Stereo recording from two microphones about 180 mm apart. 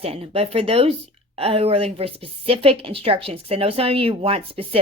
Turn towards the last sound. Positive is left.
turn(degrees=-30)  # may be behind; listen again after turning